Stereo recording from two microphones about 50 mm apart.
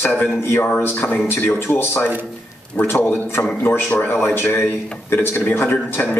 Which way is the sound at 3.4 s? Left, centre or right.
Left.